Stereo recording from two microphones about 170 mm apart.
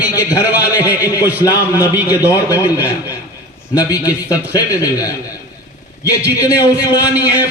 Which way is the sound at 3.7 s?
20° left (ahead or behind).